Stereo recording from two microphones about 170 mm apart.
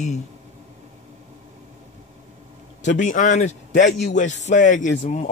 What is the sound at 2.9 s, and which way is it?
A man's voice, 45° left (ahead or behind).